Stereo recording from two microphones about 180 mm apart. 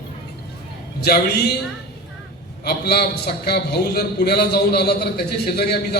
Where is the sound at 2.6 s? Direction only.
65° left (ahead or behind).